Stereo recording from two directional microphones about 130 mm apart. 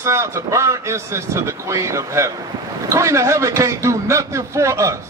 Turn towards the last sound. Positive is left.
turn(degrees=-25)  # may be behind; listen again after turning